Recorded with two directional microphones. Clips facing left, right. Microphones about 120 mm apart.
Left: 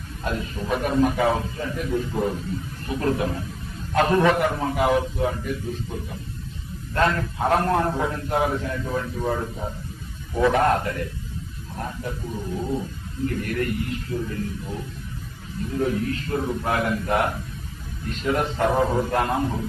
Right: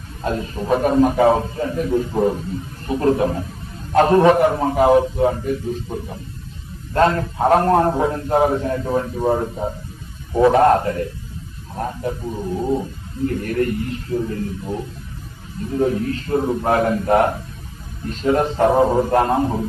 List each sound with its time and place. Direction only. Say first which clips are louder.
0.3 s a man's voice: right 6 dB; 35° right (ahead or behind)
13.2 s a man's voice: right 5 dB; 35° right (ahead or behind)
15.8 s a man's voice: right 5 dB; 35° right (ahead or behind)